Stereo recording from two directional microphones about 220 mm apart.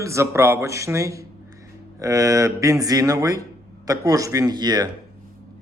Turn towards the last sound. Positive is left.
turn(degrees=-20)  # may be behind; listen again after turning